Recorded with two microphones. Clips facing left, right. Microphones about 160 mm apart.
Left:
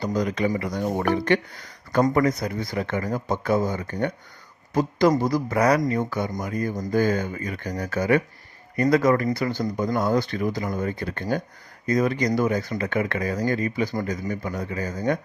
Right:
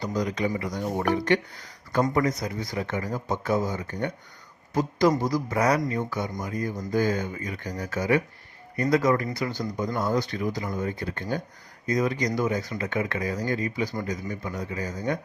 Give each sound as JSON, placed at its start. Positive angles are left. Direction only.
{"t": 0.0, "sound": "speech", "side_deg": 60}